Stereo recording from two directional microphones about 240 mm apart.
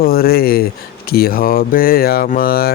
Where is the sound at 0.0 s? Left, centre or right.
Left.